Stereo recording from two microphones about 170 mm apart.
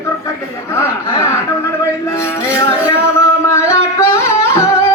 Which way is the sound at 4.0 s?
15° left (ahead or behind).